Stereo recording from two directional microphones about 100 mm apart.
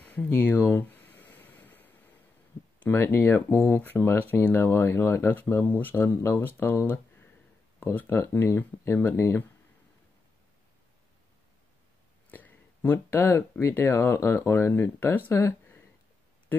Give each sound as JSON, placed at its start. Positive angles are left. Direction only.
{"t": 0.0, "sound": "a sound", "side_deg": 15}
{"t": 2.8, "sound": "speech", "side_deg": 20}
{"t": 6.5, "sound": "speech", "side_deg": 15}
{"t": 12.3, "sound": "speech", "side_deg": 20}